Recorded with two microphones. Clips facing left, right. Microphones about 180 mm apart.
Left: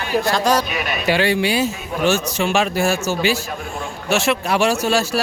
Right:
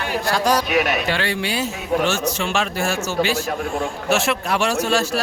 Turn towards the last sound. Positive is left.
turn(degrees=5)  # may be behind; listen again after turning